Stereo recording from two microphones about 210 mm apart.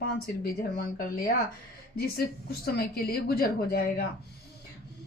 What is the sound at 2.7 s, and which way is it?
A woman's voice, 50° left (ahead or behind).